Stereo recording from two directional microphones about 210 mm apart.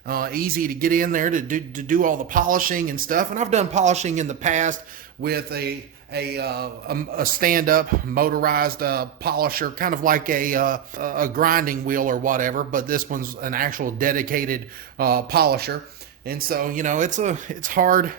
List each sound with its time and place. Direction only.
0.1 s speech: 45° right (ahead or behind)
5.2 s a man's voice: 50° right (ahead or behind)